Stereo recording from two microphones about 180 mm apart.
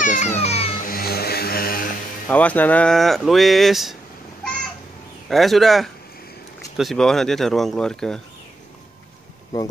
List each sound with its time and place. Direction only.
0.0 s music: 40° left (ahead or behind)
0.8 s music: 55° left (ahead or behind)
2.2 s speech: 10° left (ahead or behind)
5.3 s speech: centre (ahead or behind)